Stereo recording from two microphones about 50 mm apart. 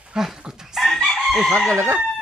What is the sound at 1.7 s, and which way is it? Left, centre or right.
Speech, right.